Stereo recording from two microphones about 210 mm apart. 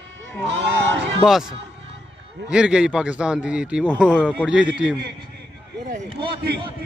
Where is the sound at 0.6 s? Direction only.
55° right (ahead or behind).